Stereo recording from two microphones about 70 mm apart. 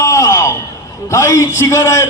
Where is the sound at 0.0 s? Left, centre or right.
Left.